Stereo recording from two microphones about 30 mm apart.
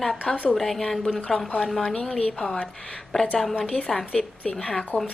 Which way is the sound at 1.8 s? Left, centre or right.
Centre.